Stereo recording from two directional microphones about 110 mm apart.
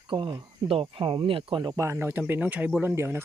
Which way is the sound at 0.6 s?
55° right (ahead or behind).